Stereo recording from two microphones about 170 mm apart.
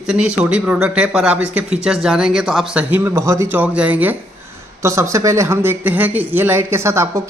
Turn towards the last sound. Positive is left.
turn(degrees=-15)  # may be behind; listen again after turning